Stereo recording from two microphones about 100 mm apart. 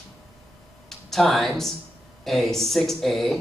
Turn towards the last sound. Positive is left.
turn(degrees=0)  # may be behind; listen again after turning